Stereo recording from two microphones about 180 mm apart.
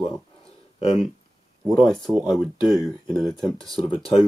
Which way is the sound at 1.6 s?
Centre (ahead or behind).